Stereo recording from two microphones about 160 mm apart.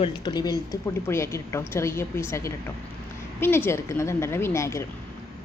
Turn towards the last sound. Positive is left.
turn(degrees=15)  # may be behind; listen again after turning